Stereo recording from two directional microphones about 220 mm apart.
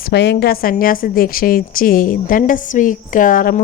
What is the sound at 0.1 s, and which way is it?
A woman's voice, 50° left (ahead or behind).